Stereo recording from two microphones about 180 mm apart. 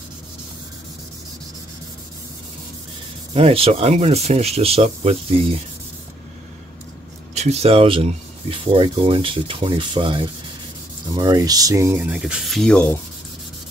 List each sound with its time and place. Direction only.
3.3 s speech: 35° right (ahead or behind)
7.3 s speech: 35° right (ahead or behind); by 13.0 s 5° left (ahead or behind)